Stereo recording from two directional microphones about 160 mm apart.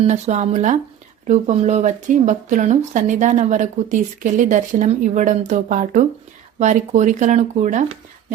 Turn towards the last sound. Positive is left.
turn(degrees=-50)  # may be behind; listen again after turning